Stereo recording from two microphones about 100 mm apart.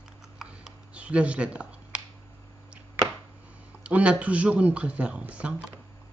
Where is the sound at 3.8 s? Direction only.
10° right (ahead or behind).